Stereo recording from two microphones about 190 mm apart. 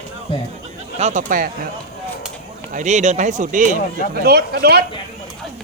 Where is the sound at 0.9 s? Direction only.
40° right (ahead or behind).